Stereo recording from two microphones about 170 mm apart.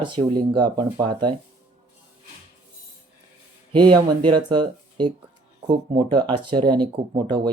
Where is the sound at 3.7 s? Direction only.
30° right (ahead or behind).